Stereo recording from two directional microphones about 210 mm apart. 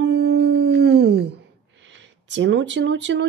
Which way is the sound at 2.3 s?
60° right (ahead or behind).